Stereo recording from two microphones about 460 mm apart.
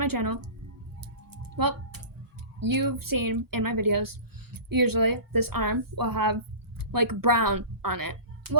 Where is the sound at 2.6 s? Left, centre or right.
Right.